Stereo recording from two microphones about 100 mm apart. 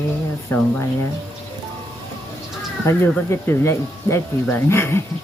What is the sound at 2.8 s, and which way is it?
Speech, 25° left (ahead or behind).